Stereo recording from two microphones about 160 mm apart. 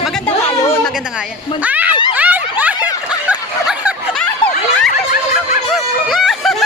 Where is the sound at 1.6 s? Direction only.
10° right (ahead or behind).